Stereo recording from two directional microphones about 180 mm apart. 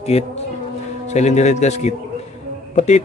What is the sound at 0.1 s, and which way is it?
A man's voice, 35° left (ahead or behind).